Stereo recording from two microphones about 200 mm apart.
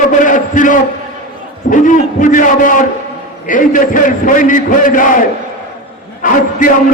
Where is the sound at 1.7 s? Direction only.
40° left (ahead or behind).